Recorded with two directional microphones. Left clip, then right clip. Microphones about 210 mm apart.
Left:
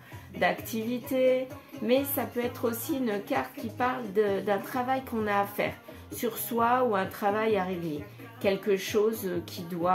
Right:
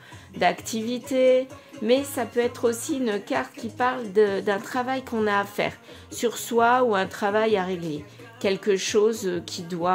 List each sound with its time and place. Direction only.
0.4 s a woman's voice: 50° right (ahead or behind)